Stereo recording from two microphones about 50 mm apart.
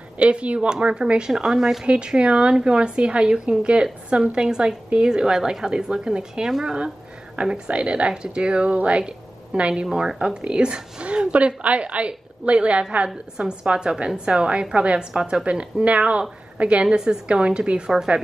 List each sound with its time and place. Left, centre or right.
0.2 s a woman's voice: right
15.4 s a woman's voice: right